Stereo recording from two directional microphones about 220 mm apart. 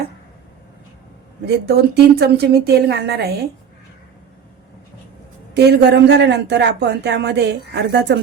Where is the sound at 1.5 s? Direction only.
50° right (ahead or behind).